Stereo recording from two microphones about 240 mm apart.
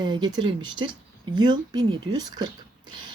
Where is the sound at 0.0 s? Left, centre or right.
Centre.